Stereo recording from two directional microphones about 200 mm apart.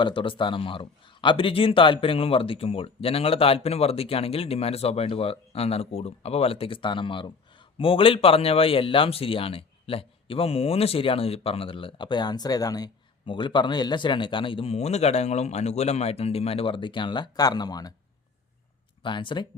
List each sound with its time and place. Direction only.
0.0 s speech: 25° left (ahead or behind)
19.0 s speech: 25° left (ahead or behind)